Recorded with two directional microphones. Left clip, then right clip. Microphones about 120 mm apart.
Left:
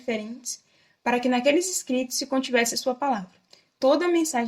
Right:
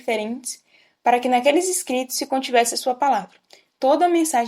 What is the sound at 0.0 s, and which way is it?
A woman's voice, 55° right (ahead or behind).